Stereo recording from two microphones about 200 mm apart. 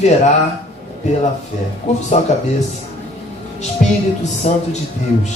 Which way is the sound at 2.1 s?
35° left (ahead or behind).